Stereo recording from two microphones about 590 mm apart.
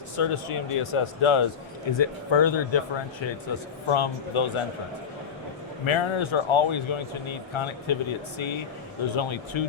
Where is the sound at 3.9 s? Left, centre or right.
Left.